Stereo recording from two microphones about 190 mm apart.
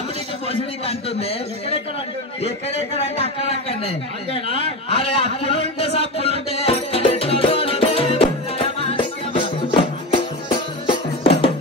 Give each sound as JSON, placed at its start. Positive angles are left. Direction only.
{"t": 0.8, "sound": "speech", "side_deg": 30}
{"t": 3.2, "sound": "speech", "side_deg": 30}
{"t": 4.8, "sound": "a sound", "side_deg": 30}